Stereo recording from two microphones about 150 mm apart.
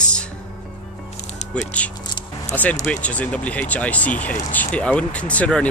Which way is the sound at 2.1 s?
30° left (ahead or behind).